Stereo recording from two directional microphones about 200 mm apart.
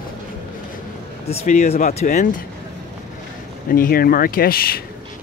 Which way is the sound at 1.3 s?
35° left (ahead or behind).